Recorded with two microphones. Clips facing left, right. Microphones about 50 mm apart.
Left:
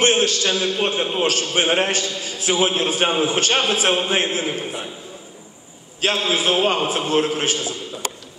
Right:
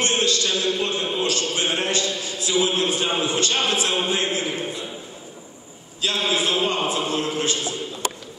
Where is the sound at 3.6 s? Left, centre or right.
Left.